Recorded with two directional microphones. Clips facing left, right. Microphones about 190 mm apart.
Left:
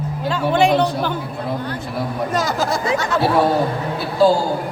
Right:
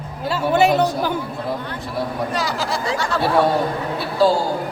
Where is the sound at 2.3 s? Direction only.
45° left (ahead or behind).